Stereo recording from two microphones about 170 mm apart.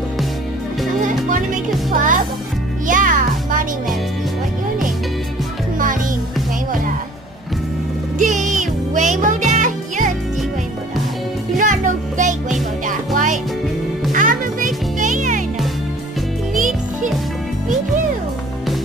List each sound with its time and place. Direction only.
1.0 s music: 50° right (ahead or behind)
1.9 s speech: 50° right (ahead or behind)
2.9 s music: 50° right (ahead or behind)
8.2 s music: 45° right (ahead or behind)
11.5 s music: 50° right (ahead or behind)